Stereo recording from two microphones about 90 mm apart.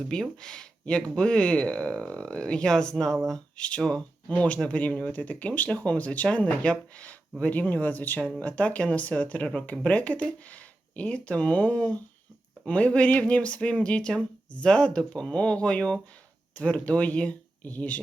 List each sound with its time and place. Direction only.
0.1 s speech: 5° left (ahead or behind)